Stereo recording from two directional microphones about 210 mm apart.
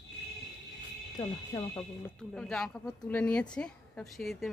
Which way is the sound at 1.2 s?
15° left (ahead or behind).